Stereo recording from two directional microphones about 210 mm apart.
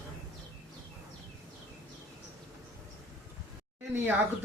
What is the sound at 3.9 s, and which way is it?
Speech, 10° right (ahead or behind).